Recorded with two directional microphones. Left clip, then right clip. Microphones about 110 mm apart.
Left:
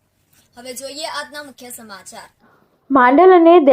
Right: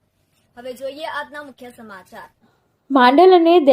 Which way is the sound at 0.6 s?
5° right (ahead or behind).